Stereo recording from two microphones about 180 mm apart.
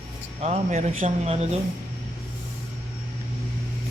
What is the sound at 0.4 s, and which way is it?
Speech, 40° right (ahead or behind).